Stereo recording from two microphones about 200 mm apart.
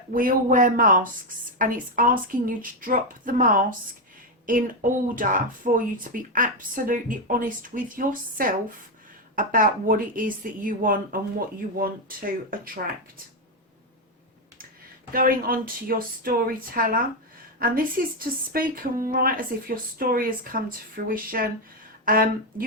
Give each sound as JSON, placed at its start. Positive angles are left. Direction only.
{"t": 0.1, "sound": "speech", "side_deg": -45}
{"t": 15.1, "sound": "speech", "side_deg": -45}